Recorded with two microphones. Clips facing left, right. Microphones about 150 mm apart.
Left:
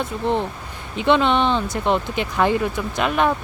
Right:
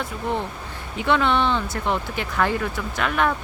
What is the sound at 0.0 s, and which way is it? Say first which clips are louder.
Speech: left 4 dB; 20° left (ahead or behind).